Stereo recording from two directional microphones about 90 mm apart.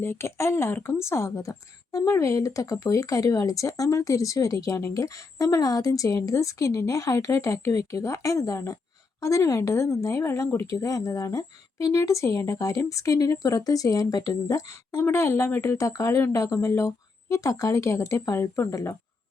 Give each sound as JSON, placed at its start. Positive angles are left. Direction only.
{"t": 0.0, "sound": "speech", "side_deg": 30}